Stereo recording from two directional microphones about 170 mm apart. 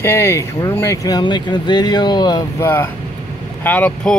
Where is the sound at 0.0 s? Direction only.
15° left (ahead or behind).